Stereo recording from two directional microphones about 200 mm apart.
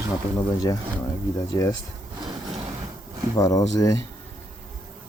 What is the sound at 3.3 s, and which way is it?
Speech, 15° left (ahead or behind).